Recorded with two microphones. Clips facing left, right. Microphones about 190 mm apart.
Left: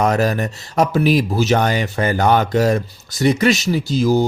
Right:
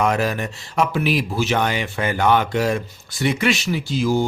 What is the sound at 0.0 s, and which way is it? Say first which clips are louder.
Speech: left 3 dB; 40° left (ahead or behind).